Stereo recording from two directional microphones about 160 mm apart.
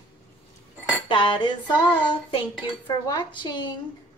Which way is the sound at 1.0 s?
30° left (ahead or behind).